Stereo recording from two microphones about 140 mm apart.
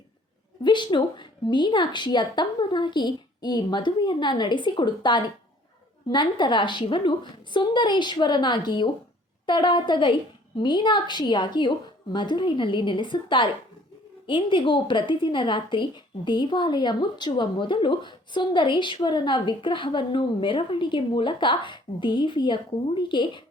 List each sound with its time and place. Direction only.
0.6 s a woman's voice: 35° left (ahead or behind)